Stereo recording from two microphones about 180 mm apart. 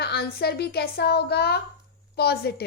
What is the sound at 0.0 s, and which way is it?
A woman's voice, 60° left (ahead or behind).